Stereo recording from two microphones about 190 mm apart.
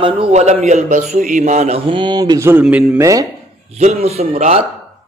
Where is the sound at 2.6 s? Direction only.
5° right (ahead or behind).